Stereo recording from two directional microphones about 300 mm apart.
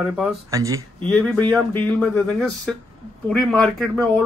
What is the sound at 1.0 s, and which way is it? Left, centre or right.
Speech, centre.